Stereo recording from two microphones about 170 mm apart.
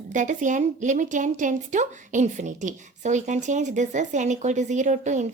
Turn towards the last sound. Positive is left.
turn(degrees=-45)  # may be behind; listen again after turning